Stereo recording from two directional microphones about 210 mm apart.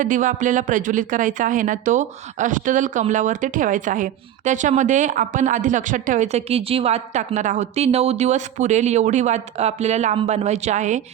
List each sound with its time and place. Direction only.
0.0 s speech: 40° right (ahead or behind)